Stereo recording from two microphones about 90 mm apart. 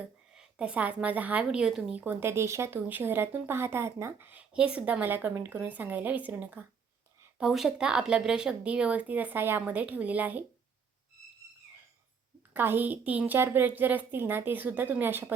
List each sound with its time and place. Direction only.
0.3 s a woman's voice: 15° right (ahead or behind)
7.3 s speech: 5° right (ahead or behind)
12.5 s a woman's voice: 20° right (ahead or behind)